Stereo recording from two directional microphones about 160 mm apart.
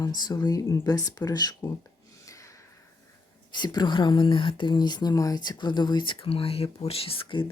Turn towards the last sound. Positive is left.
turn(degrees=35)  # may be behind; listen again after turning